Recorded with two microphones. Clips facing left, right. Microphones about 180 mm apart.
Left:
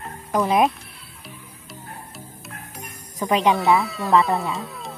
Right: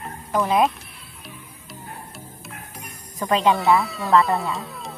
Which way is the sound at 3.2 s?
15° left (ahead or behind).